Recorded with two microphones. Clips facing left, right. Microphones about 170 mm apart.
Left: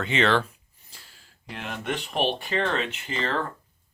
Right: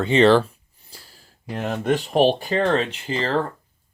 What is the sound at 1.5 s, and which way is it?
Speech, 40° right (ahead or behind).